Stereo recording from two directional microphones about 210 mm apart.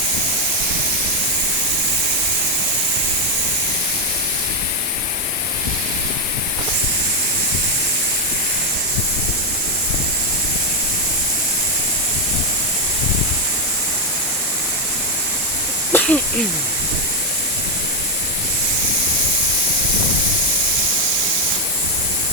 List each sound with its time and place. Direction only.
15.9 s snake: 10° left (ahead or behind)